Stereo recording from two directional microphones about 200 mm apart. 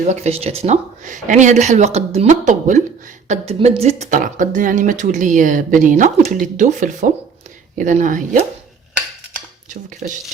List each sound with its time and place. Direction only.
0.1 s speech: 30° right (ahead or behind)
10.0 s speech: 40° right (ahead or behind)